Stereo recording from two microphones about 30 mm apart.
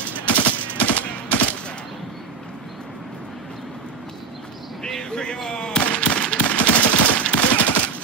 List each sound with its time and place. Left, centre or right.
0.3 s machine gun: left
4.8 s a sound: left
5.8 s machine gun: left
6.6 s machine gun: left